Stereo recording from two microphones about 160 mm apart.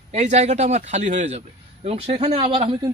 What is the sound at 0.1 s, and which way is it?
Speech, 45° right (ahead or behind).